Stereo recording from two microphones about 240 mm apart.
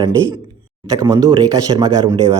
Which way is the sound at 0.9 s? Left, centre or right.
Centre.